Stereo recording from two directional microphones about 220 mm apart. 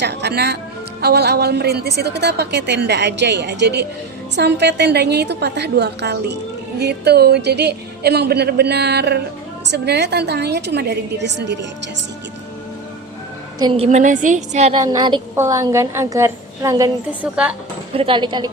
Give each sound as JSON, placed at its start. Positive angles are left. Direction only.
{"t": 0.0, "sound": "a woman's voice", "side_deg": -50}
{"t": 13.6, "sound": "a woman's voice", "side_deg": -25}
{"t": 14.8, "sound": "a woman's voice", "side_deg": -20}
{"t": 17.9, "sound": "a woman's voice", "side_deg": -25}